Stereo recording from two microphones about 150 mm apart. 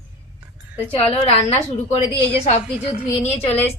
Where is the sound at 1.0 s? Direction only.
40° left (ahead or behind).